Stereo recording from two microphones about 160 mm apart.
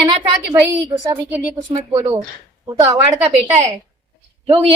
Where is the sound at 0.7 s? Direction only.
20° right (ahead or behind).